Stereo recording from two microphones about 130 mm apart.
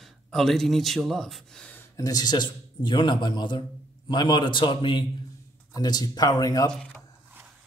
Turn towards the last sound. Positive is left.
turn(degrees=30)  # may be behind; listen again after turning